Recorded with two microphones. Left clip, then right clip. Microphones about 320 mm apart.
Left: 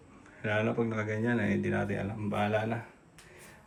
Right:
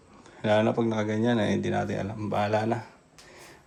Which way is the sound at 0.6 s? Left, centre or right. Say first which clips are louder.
Right 5 dB; centre.